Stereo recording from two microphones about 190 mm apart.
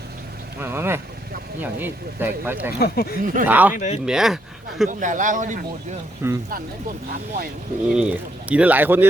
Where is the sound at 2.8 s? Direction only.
55° left (ahead or behind).